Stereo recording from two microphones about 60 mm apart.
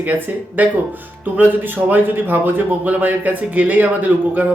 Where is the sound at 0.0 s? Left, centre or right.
Right.